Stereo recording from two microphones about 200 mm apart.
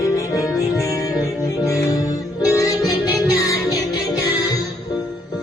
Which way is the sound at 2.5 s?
15° left (ahead or behind).